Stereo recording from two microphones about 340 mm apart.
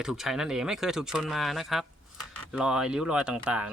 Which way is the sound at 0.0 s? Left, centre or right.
Centre.